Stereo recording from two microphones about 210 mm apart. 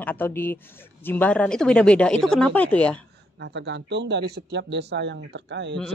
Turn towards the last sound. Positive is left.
turn(degrees=-55)  # may be behind; listen again after turning